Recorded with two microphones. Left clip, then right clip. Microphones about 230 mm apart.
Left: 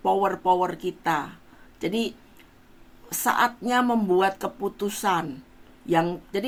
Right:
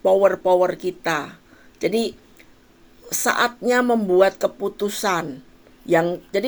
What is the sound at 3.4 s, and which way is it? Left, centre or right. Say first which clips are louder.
Speech: right 4 dB; centre.